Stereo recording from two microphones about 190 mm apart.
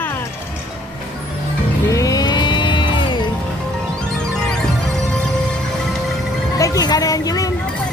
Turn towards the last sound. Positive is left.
turn(degrees=20)  # may be behind; listen again after turning